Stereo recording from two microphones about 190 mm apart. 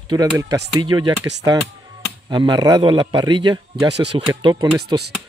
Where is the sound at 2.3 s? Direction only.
25° right (ahead or behind).